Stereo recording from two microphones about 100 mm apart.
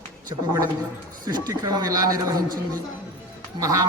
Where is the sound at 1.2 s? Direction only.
40° right (ahead or behind).